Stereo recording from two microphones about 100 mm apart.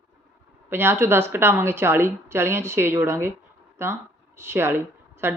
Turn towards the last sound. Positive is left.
turn(degrees=-25)  # may be behind; listen again after turning